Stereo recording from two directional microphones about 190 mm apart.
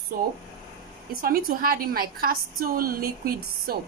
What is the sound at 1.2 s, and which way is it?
A woman's voice, 50° right (ahead or behind).